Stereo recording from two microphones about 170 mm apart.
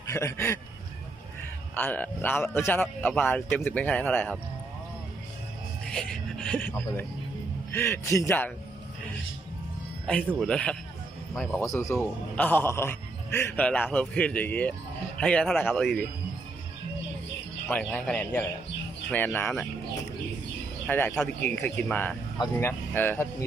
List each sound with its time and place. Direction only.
0.1 s a man's voice: 15° left (ahead or behind)
1.7 s a man's voice: 10° left (ahead or behind)
5.8 s a man's voice: 5° left (ahead or behind)
10.4 s a man's voice: 5° left (ahead or behind)
11.6 s a man's voice: 20° left (ahead or behind)
17.7 s a man's voice: 10° left (ahead or behind)
20.8 s a man's voice: 10° left (ahead or behind)